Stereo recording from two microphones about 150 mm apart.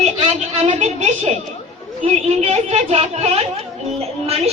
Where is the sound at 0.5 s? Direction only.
50° right (ahead or behind).